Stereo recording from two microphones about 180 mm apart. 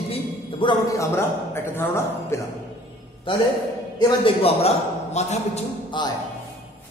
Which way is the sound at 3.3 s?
30° left (ahead or behind).